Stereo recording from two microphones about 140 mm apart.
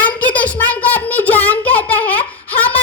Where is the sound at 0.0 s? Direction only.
10° left (ahead or behind).